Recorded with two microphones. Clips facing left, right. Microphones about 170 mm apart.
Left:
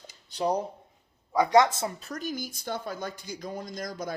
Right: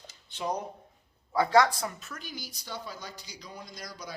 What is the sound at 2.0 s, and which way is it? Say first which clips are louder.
Speech: left 9 dB; 45° left (ahead or behind).